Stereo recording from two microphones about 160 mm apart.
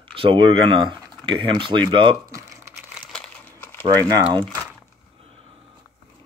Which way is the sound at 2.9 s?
5° left (ahead or behind).